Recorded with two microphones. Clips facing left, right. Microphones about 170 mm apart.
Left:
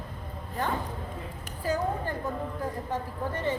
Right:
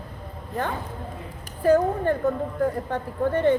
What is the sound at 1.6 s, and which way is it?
A woman's voice, 60° right (ahead or behind).